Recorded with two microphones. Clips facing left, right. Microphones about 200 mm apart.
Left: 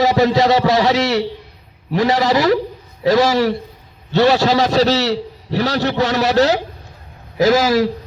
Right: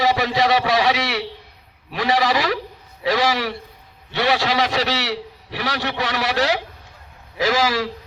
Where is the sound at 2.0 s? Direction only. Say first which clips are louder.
Left 4 dB; 25° left (ahead or behind).